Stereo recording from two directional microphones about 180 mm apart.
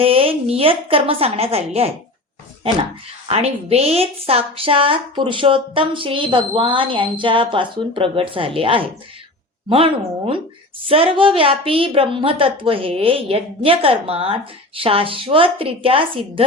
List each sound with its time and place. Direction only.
0.0 s a woman's voice: 30° right (ahead or behind)
3.2 s a woman's voice: 35° right (ahead or behind)